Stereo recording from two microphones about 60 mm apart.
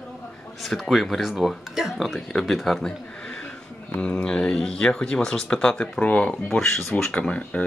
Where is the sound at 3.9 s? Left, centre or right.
Centre.